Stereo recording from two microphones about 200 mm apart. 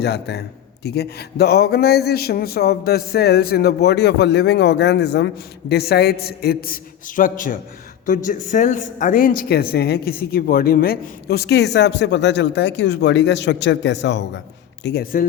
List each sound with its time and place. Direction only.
0.0 s a man's voice: 55° left (ahead or behind)
14.8 s a man's voice: 50° left (ahead or behind)